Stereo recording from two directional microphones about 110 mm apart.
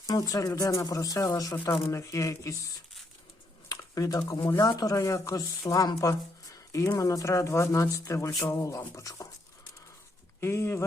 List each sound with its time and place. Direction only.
0.1 s speech: 35° left (ahead or behind)
10.4 s speech: 25° left (ahead or behind)